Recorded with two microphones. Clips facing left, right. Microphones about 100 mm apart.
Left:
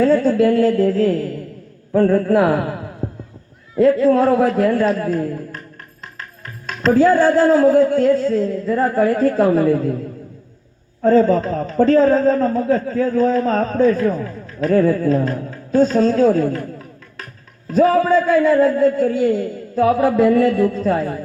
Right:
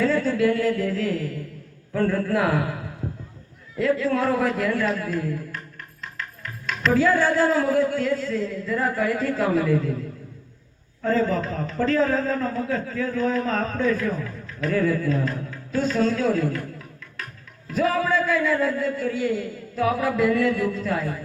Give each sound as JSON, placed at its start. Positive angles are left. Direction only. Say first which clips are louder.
{"t": 0.0, "sound": "a man's voice", "louder": "left 7 dB", "side_deg": 35}
{"t": 3.0, "sound": "horse", "louder": "left 5 dB", "side_deg": 35}
{"t": 3.8, "sound": "a man's voice", "louder": "left 9 dB", "side_deg": 35}
{"t": 6.0, "sound": "music", "louder": "right 1 dB", "side_deg": 35}
{"t": 11.0, "sound": "a man's voice", "louder": "left 9 dB", "side_deg": 35}